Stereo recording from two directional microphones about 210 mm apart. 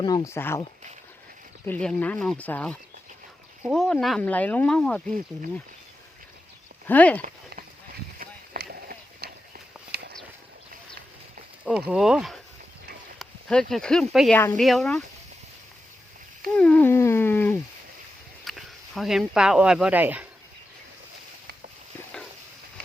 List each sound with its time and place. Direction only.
0.0 s speech: 15° left (ahead or behind)
1.6 s speech: 5° left (ahead or behind)
6.8 s speech: 5° left (ahead or behind)
8.2 s run: 45° right (ahead or behind)
9.9 s a sound: 50° right (ahead or behind)
11.9 s speech: 5° right (ahead or behind)
16.6 s speech: 5° left (ahead or behind)
18.4 s speech: centre (ahead or behind)